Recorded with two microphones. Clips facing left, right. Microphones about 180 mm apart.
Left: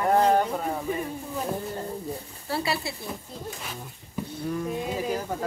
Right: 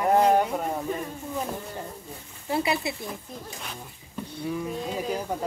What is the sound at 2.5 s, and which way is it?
Speech, 20° right (ahead or behind).